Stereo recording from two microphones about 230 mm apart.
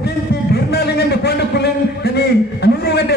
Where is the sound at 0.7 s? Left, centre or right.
Left.